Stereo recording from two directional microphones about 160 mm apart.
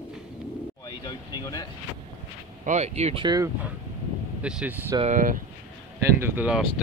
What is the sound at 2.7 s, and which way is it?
Speech, 45° right (ahead or behind).